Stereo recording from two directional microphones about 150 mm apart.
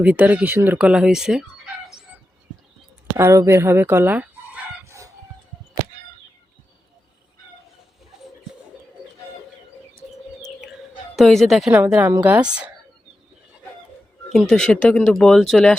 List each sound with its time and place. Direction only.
0.0 s speech: 10° right (ahead or behind)
3.1 s speech: 15° right (ahead or behind)
4.9 s chicken: 20° right (ahead or behind)
11.2 s speech: centre (ahead or behind)
11.7 s speech: 10° right (ahead or behind)
14.3 s speech: 5° left (ahead or behind)